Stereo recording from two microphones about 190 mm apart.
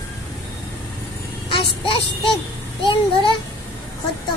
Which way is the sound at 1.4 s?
30° left (ahead or behind).